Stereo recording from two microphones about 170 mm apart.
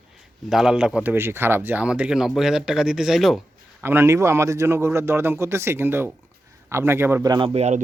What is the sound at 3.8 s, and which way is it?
A man's voice, 15° right (ahead or behind).